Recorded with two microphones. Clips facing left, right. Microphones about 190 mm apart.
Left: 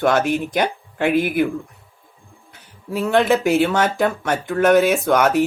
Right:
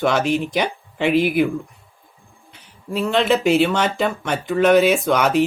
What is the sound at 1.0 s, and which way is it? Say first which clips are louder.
Speech: right 1 dB; 50° left (ahead or behind).